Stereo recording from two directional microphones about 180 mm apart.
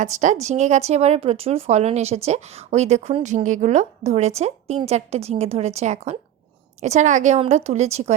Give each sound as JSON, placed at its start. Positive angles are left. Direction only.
{"t": 0.0, "sound": "speech", "side_deg": -45}